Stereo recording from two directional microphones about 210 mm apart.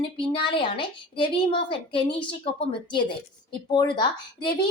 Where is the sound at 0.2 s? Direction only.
25° left (ahead or behind).